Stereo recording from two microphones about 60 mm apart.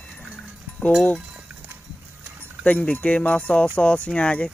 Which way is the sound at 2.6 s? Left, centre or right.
Left.